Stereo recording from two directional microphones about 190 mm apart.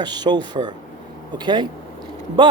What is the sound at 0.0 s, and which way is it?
Speech, 20° right (ahead or behind).